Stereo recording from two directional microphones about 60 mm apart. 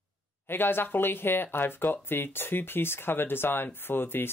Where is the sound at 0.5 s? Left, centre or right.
Left.